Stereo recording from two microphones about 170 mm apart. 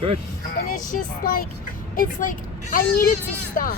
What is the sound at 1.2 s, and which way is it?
A woman's voice, 55° left (ahead or behind).